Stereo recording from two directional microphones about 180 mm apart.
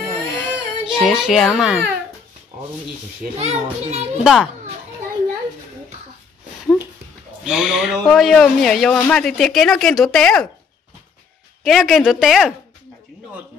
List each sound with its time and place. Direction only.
0.0 s baby cry: centre (ahead or behind)
3.3 s a child's voice: 35° right (ahead or behind)
4.2 s speech: centre (ahead or behind)
7.4 s speech: 5° right (ahead or behind)
11.6 s speech: centre (ahead or behind)